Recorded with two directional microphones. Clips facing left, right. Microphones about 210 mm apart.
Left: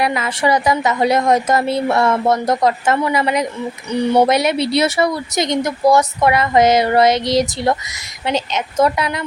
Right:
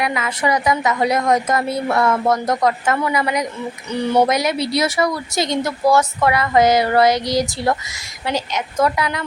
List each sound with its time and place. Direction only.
0.0 s speech: 35° left (ahead or behind)